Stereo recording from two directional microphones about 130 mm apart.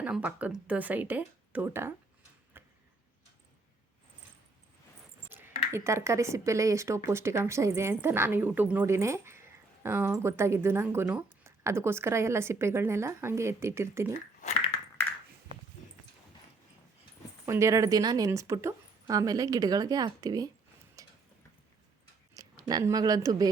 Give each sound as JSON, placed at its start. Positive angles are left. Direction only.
{"t": 0.0, "sound": "speech", "side_deg": -10}
{"t": 2.5, "sound": "arrow", "side_deg": -15}
{"t": 5.3, "sound": "speech", "side_deg": -20}
{"t": 17.4, "sound": "speech", "side_deg": -20}
{"t": 21.0, "sound": "a sound", "side_deg": -25}
{"t": 22.4, "sound": "speech", "side_deg": -25}